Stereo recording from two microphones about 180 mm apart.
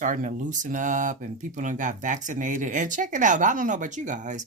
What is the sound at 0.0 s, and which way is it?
Speech, 45° right (ahead or behind).